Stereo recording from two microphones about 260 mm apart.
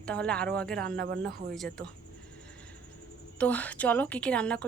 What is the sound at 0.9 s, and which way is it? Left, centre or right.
Speech, right.